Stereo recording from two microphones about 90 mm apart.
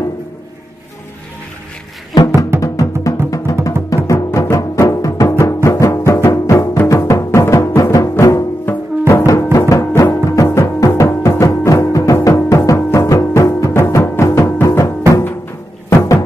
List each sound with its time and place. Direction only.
2.6 s music: 35° left (ahead or behind)